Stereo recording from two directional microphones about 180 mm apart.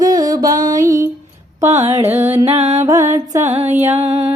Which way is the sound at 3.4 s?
35° right (ahead or behind).